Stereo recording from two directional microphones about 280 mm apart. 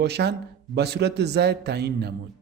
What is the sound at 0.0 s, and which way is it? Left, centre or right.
A man's voice, right.